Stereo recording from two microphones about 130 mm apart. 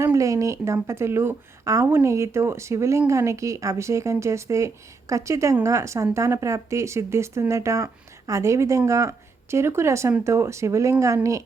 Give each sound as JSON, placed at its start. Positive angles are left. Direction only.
{"t": 0.0, "sound": "a woman's voice", "side_deg": -25}